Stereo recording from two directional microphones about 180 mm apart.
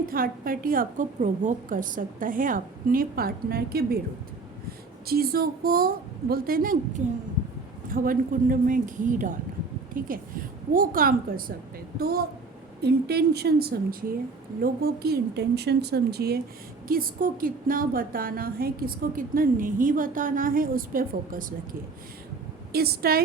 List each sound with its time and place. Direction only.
0.0 s a woman's voice: 55° right (ahead or behind)
5.0 s a woman's voice: 55° right (ahead or behind)